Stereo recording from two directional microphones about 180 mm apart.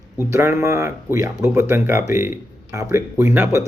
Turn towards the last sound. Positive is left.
turn(degrees=-15)  # may be behind; listen again after turning